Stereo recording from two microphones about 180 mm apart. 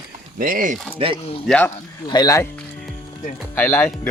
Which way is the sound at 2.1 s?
20° left (ahead or behind).